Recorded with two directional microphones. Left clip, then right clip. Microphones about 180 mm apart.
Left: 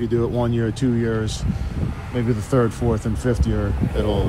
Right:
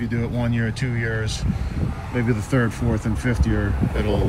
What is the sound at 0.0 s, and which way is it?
Speech, 20° left (ahead or behind).